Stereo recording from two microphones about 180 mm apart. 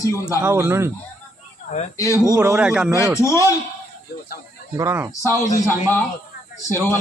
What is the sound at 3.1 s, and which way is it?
Speech, 15° left (ahead or behind).